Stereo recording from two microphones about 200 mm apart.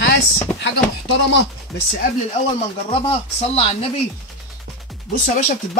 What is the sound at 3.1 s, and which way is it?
Speech, 30° left (ahead or behind).